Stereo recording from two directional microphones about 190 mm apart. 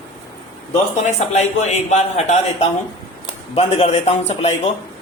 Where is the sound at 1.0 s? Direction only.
35° left (ahead or behind).